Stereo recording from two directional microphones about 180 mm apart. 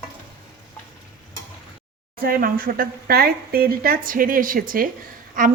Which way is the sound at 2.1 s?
55° right (ahead or behind).